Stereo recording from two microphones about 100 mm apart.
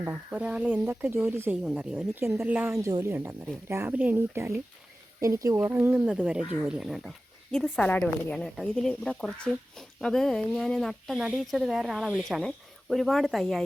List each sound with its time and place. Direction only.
0.3 s speech: 10° right (ahead or behind)
0.9 s speech: 25° right (ahead or behind)
2.8 s speech: 35° right (ahead or behind)
5.2 s speech: 35° right (ahead or behind); by 6.8 s 15° right (ahead or behind)
6.8 s speech: centre (ahead or behind)
7.5 s a woman's voice: 15° left (ahead or behind)
8.4 s speech: centre (ahead or behind)